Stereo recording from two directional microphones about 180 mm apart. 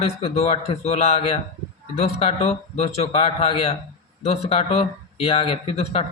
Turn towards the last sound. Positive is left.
turn(degrees=30)  # may be behind; listen again after turning